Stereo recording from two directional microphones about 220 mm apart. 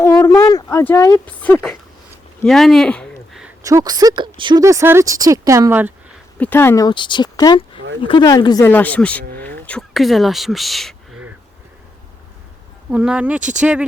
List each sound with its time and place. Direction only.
0.0 s speech: 10° left (ahead or behind)
2.4 s a sound: centre (ahead or behind)
3.6 s speech: 15° right (ahead or behind)
6.4 s speech: 10° left (ahead or behind)
9.4 s a sound: 5° left (ahead or behind)
12.9 s speech: 5° right (ahead or behind)